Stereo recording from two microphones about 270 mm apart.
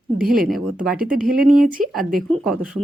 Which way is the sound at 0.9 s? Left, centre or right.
Right.